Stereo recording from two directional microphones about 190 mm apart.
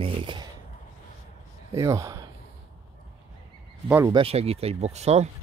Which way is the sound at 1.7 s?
15° right (ahead or behind).